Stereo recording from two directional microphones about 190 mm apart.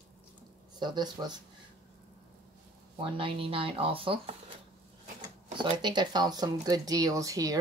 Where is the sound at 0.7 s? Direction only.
20° right (ahead or behind).